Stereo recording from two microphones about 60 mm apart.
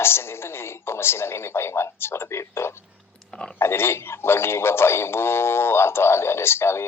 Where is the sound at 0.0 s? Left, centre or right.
Left.